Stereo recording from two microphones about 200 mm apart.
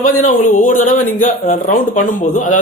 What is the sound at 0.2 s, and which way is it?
A man's voice, 40° left (ahead or behind).